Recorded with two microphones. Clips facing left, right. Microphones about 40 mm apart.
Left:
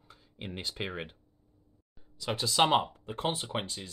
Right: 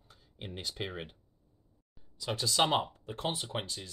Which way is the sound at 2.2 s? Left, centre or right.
Centre.